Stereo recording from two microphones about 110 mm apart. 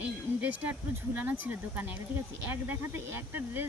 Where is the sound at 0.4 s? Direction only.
15° right (ahead or behind).